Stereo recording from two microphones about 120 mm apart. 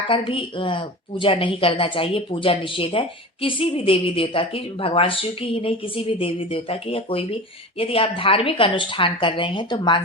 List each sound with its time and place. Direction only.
0.1 s speech: 45° left (ahead or behind)